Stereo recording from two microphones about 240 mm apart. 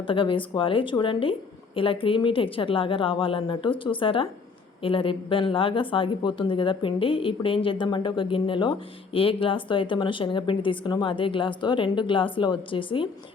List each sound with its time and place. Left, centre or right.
0.0 s a woman's voice: left